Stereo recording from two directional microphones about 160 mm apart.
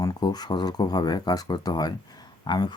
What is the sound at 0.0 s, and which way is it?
Speech, 25° left (ahead or behind).